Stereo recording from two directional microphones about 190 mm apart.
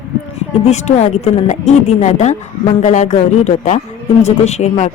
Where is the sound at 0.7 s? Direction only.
35° left (ahead or behind).